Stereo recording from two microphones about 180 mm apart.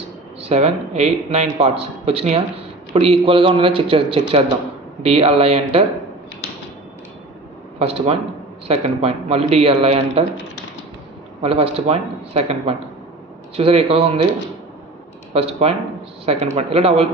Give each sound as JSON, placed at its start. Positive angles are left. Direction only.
{"t": 0.4, "sound": "speech", "side_deg": -35}
{"t": 7.8, "sound": "speech", "side_deg": -35}
{"t": 11.4, "sound": "speech", "side_deg": -30}
{"t": 15.3, "sound": "speech", "side_deg": -35}